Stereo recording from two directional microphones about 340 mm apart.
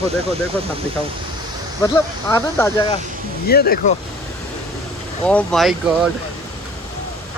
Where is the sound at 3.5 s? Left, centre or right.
Left.